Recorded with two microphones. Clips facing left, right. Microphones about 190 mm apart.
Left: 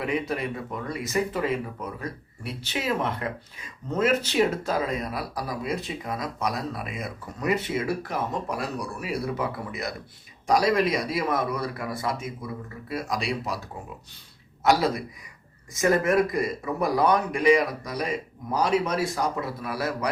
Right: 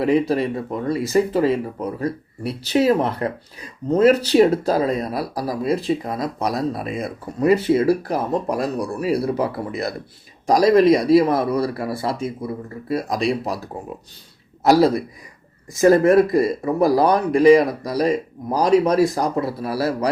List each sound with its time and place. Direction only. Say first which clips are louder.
0.0 s speech: right 10 dB; 35° right (ahead or behind)
14.6 s speech: right 7 dB; 35° right (ahead or behind)